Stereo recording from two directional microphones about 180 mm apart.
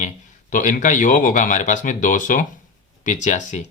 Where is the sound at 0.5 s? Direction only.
45° left (ahead or behind).